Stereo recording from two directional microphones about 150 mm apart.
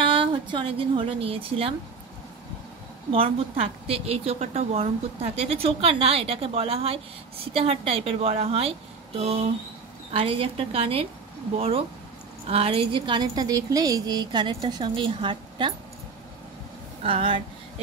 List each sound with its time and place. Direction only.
0.0 s a woman's voice: 35° right (ahead or behind)
3.1 s a woman's voice: 40° right (ahead or behind)
17.0 s a woman's voice: 35° right (ahead or behind)